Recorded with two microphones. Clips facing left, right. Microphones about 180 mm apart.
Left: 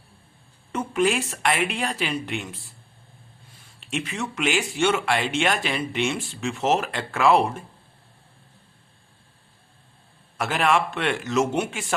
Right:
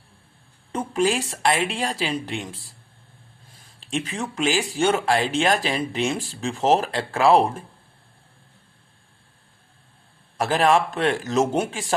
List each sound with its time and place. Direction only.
0.7 s speech: 35° right (ahead or behind)
3.8 s speech: 35° right (ahead or behind)
10.3 s speech: 35° right (ahead or behind)